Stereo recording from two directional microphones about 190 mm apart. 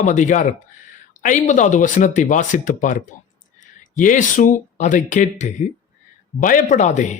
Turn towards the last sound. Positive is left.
turn(degrees=40)  # may be behind; listen again after turning